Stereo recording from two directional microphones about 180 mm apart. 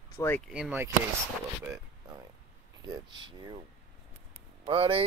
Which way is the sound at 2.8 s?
20° right (ahead or behind).